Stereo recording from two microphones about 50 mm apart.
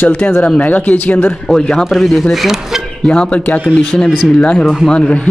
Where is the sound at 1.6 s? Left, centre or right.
Centre.